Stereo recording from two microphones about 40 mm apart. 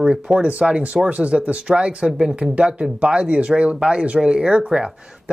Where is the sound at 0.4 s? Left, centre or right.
Right.